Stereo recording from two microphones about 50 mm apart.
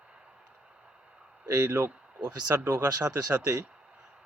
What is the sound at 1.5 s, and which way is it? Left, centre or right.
Speech, right.